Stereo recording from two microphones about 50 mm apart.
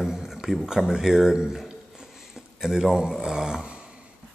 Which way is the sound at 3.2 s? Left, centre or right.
Centre.